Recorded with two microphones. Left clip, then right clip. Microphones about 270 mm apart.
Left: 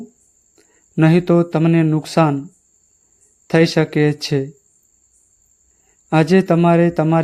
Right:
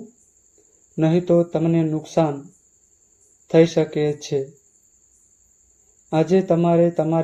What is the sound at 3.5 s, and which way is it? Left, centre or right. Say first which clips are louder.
Mantra: left 1 dB; left.